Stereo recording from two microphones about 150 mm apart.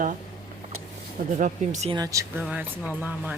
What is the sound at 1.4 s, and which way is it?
Speech, 55° right (ahead or behind).